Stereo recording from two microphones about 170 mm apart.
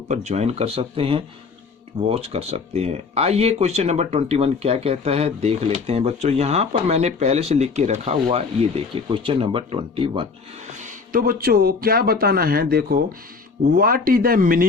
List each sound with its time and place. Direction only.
0.1 s speech: 40° right (ahead or behind)
10.7 s speech: 50° right (ahead or behind)